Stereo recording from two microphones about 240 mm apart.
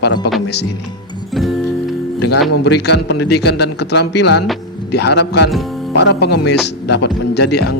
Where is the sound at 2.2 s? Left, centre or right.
Left.